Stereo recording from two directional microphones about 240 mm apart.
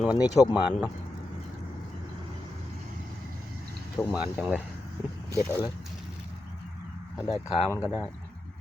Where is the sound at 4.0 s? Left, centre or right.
Centre.